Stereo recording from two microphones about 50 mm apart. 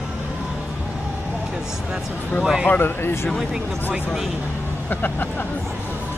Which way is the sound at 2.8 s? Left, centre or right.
Left.